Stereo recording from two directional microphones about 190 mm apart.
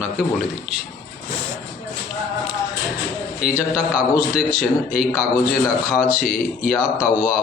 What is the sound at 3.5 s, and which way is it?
Speech, 10° right (ahead or behind).